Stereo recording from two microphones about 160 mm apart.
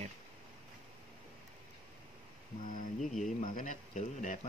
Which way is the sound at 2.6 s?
55° left (ahead or behind).